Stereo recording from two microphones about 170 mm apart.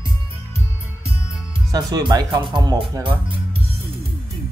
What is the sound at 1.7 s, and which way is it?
Speech, 20° right (ahead or behind).